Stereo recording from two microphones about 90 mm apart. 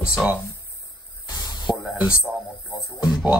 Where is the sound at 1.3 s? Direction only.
45° left (ahead or behind).